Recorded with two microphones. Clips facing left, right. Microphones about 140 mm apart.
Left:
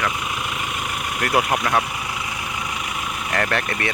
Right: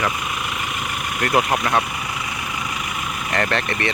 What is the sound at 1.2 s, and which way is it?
Speech, 5° left (ahead or behind).